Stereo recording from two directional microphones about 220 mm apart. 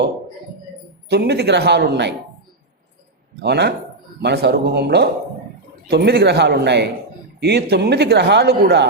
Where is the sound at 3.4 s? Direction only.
50° right (ahead or behind).